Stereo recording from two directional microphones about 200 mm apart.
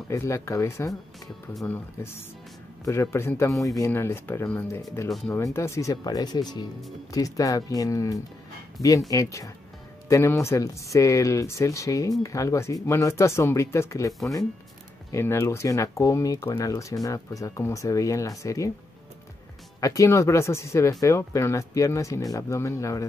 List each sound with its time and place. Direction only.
0.1 s speech: 15° left (ahead or behind)
1.5 s speech: centre (ahead or behind)
2.0 s speech: 10° left (ahead or behind)
19.8 s speech: 15° left (ahead or behind)